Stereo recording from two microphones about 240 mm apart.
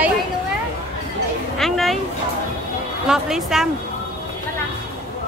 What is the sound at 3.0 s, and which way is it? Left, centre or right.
Speech, centre.